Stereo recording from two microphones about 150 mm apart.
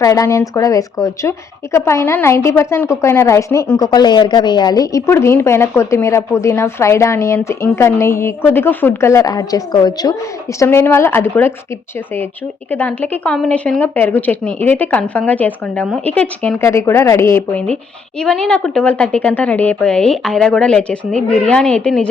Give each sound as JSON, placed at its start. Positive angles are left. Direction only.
{"t": 0.0, "sound": "a woman's voice", "side_deg": 20}
{"t": 12.7, "sound": "a woman's voice", "side_deg": 10}
{"t": 18.2, "sound": "a woman's voice", "side_deg": 5}